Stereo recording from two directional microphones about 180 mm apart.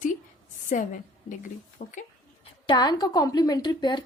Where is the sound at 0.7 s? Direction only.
45° left (ahead or behind).